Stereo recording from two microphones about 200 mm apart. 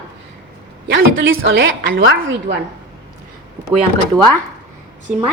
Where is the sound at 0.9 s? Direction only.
70° right (ahead or behind).